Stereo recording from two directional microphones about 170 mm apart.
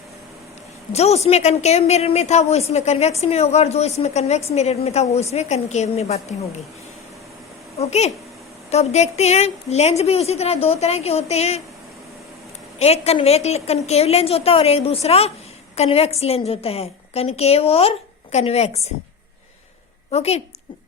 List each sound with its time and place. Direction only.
0.9 s a woman's voice: 40° left (ahead or behind)
7.8 s a woman's voice: 40° left (ahead or behind)
12.8 s a woman's voice: 40° left (ahead or behind)
20.1 s a woman's voice: 40° left (ahead or behind)